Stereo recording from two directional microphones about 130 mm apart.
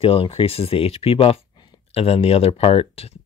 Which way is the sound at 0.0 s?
45° left (ahead or behind).